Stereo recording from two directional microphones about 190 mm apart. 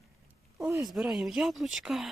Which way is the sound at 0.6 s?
15° right (ahead or behind).